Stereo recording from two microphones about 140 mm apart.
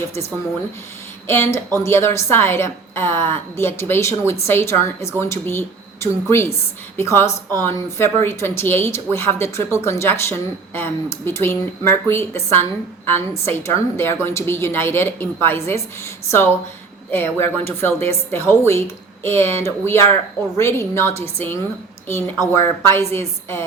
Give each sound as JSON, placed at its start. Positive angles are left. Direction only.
{"t": 1.3, "sound": "a woman's voice", "side_deg": 20}
{"t": 17.1, "sound": "a woman's voice", "side_deg": 15}